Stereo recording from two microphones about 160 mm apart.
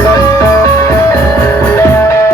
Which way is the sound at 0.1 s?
20° left (ahead or behind).